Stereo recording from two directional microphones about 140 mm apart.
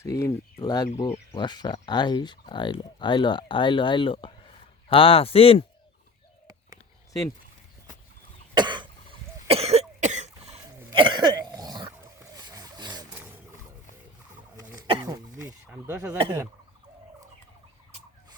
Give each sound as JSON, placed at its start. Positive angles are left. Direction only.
{"t": 0.0, "sound": "speech", "side_deg": 20}
{"t": 8.5, "sound": "cough", "side_deg": -35}
{"t": 9.5, "sound": "cough", "side_deg": -50}
{"t": 10.9, "sound": "a sound", "side_deg": -35}
{"t": 14.8, "sound": "throat clearing", "side_deg": -30}
{"t": 15.7, "sound": "speech", "side_deg": -15}